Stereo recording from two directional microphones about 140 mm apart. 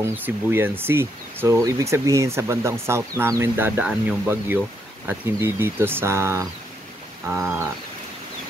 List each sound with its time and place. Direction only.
0.0 s speech: 15° right (ahead or behind)